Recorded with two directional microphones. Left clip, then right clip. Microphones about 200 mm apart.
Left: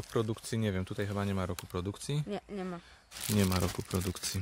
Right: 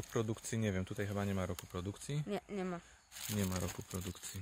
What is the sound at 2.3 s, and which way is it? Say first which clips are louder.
Speech: left 2 dB; 20° right (ahead or behind).